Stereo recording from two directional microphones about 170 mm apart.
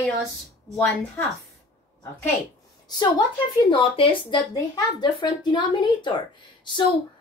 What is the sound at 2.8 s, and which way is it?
A woman's voice, 25° left (ahead or behind).